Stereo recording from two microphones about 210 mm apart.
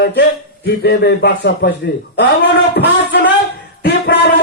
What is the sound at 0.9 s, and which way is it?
Speech, 55° left (ahead or behind).